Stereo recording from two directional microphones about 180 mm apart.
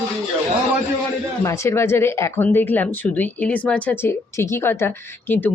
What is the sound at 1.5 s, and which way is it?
Speech, 15° left (ahead or behind).